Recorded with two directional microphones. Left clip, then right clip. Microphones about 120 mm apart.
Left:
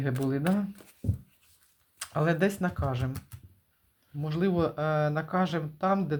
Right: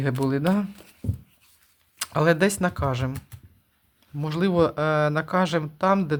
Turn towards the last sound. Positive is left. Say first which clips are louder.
# right 6 dB
turn(degrees=-45)  # may be behind; listen again after turning